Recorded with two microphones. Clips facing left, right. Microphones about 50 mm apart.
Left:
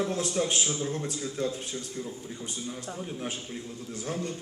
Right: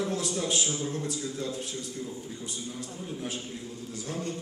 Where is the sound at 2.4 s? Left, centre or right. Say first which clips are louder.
Left 1 dB; left.